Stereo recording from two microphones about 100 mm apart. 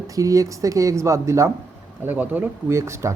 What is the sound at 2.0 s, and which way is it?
Speech, 15° right (ahead or behind).